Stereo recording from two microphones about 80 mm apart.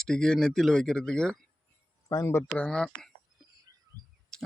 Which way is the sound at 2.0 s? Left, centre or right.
Left.